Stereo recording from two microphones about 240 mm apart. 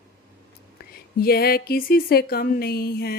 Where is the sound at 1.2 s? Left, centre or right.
Left.